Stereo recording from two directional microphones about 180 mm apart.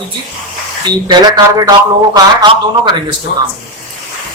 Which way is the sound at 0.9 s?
20° right (ahead or behind).